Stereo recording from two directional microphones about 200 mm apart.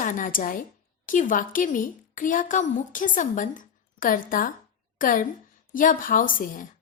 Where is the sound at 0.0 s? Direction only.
40° left (ahead or behind).